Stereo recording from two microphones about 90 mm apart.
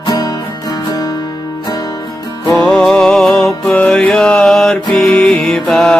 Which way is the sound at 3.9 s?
10° left (ahead or behind).